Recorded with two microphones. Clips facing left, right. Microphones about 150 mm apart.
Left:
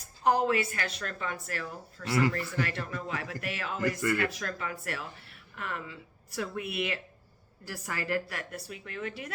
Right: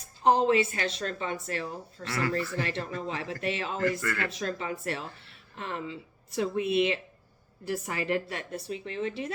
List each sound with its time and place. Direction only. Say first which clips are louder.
0.2 s a woman's voice: right 3 dB; 25° right (ahead or behind)
2.0 s speech: left 4 dB; 20° left (ahead or behind)
2.6 s a woman's voice: right 1 dB; 25° right (ahead or behind)